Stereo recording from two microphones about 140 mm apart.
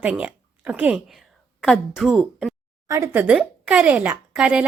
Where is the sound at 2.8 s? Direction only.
20° right (ahead or behind).